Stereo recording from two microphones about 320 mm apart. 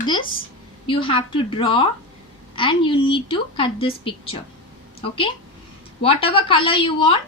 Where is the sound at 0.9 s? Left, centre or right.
Centre.